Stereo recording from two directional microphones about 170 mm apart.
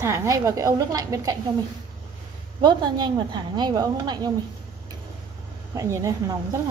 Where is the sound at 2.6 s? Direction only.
25° right (ahead or behind).